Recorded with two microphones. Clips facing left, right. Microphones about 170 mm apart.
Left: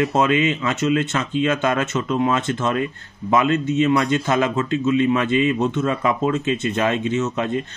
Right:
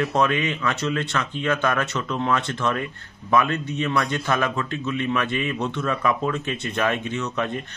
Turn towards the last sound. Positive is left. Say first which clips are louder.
# left 5 dB
turn(degrees=20)  # may be behind; listen again after turning